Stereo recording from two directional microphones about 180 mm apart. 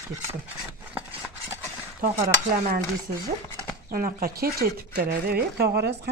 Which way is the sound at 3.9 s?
55° right (ahead or behind).